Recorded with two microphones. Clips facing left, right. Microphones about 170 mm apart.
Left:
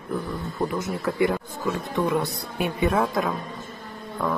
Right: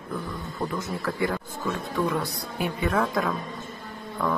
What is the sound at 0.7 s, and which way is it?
Speech, 20° left (ahead or behind).